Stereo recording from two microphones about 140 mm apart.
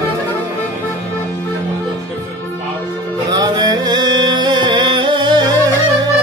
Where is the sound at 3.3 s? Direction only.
30° right (ahead or behind).